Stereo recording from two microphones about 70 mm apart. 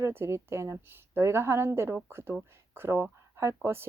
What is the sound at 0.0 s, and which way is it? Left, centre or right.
Speech, right.